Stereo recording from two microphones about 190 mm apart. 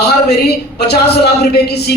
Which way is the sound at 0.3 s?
60° left (ahead or behind).